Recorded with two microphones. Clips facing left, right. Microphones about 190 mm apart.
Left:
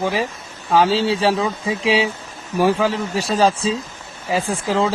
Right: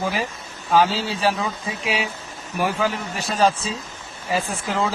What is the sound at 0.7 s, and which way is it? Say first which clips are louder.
Speech: left 3 dB; 30° left (ahead or behind).